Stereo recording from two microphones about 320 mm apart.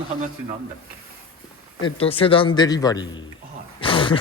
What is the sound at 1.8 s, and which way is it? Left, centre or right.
Speech, centre.